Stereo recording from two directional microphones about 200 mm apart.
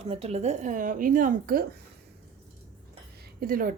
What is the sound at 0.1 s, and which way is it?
Speech, 30° right (ahead or behind).